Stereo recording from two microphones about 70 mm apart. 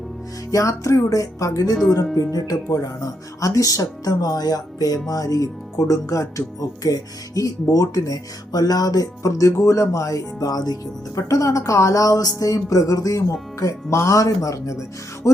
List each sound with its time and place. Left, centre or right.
0.5 s speech: left
11.2 s speech: left